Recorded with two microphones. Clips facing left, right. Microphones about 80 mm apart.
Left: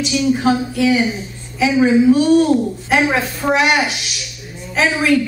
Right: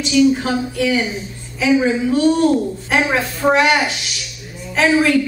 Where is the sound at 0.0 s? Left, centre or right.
Centre.